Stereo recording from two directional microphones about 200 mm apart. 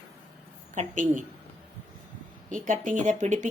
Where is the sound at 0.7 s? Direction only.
40° right (ahead or behind).